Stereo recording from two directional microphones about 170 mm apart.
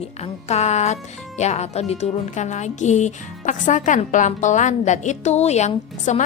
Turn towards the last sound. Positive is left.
turn(degrees=45)  # may be behind; listen again after turning